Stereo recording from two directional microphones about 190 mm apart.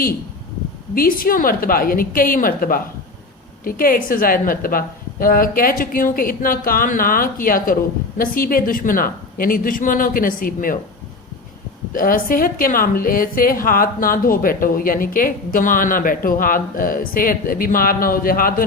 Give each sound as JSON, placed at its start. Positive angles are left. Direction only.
{"t": 0.9, "sound": "a woman's voice", "side_deg": 50}
{"t": 11.9, "sound": "a woman's voice", "side_deg": 50}